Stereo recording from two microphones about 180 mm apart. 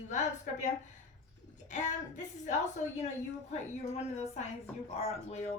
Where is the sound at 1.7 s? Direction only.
40° left (ahead or behind).